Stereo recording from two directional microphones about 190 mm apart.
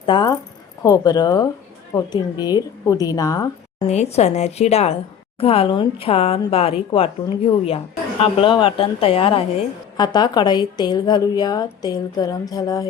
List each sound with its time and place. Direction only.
0.0 s a woman's voice: 25° left (ahead or behind)
3.8 s a woman's voice: 35° left (ahead or behind); by 12.9 s 20° left (ahead or behind)